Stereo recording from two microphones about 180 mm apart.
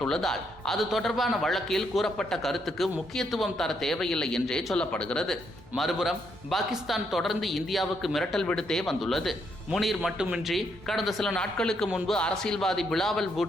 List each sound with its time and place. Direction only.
0.0 s a man's voice: 5° left (ahead or behind)